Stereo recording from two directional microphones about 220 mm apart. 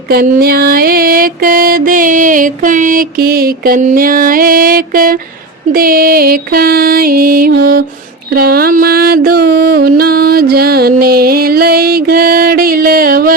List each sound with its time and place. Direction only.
0.1 s music: 40° right (ahead or behind)